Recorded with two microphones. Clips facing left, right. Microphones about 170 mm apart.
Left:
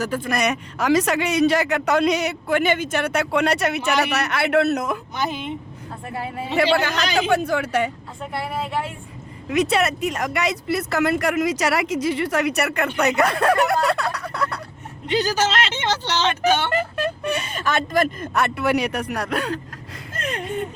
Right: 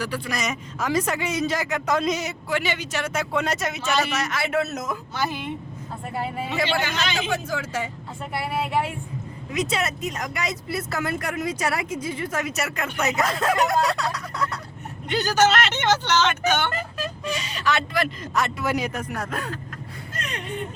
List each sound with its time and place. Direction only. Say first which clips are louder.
0.0 s speech: left 5 dB; 50° left (ahead or behind); by 4.9 s 65° left (ahead or behind)
5.1 s a woman's voice: left 2 dB; 20° left (ahead or behind)
6.6 s speech: left 8 dB; 60° left (ahead or behind)
6.9 s speech: left 3 dB; 40° left (ahead or behind)
7.3 s speech: left 7 dB; 65° left (ahead or behind)
8.3 s speech: right 1 dB; 5° right (ahead or behind)
9.5 s speech: left 6 dB; 65° left (ahead or behind)
16.0 s speech: left 2 dB; 35° left (ahead or behind)
16.7 s speech: left 7 dB; 60° left (ahead or behind); by 19.5 s 75° left (ahead or behind)
20.1 s a sound: left 6 dB; 50° left (ahead or behind)